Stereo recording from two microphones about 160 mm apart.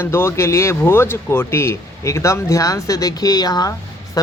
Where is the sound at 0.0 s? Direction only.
15° left (ahead or behind).